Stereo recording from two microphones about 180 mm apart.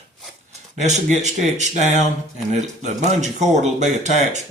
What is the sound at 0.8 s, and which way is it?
Speech, 40° right (ahead or behind).